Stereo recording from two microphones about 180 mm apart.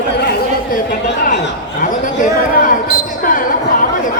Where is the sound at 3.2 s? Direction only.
50° left (ahead or behind).